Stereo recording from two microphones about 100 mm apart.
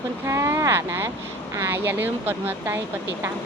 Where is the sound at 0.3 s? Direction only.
30° right (ahead or behind).